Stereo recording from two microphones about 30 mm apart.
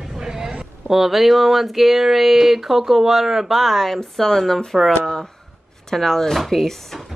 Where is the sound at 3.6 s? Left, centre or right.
Centre.